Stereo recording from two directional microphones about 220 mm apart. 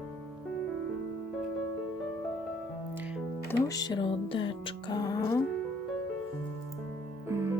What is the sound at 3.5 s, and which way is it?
Music, 15° left (ahead or behind).